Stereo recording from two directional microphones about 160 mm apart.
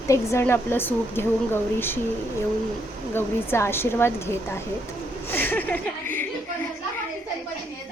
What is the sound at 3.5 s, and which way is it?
A woman's voice, 15° left (ahead or behind).